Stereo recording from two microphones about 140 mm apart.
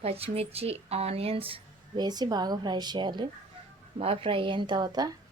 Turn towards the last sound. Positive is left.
turn(degrees=-30)  # may be behind; listen again after turning